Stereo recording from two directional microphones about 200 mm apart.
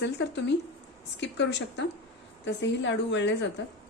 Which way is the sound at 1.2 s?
60° left (ahead or behind).